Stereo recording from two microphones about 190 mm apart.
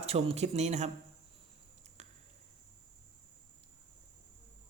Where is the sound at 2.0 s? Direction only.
35° right (ahead or behind).